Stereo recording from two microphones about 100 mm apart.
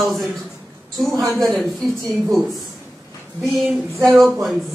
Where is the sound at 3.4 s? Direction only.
Centre (ahead or behind).